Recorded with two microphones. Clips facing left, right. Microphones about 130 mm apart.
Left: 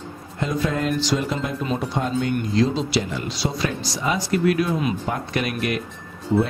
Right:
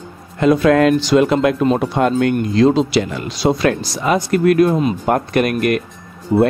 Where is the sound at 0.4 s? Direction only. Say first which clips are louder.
Right 12 dB; 80° right.